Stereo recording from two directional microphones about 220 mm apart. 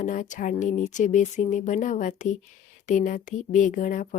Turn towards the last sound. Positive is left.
turn(degrees=35)  # may be behind; listen again after turning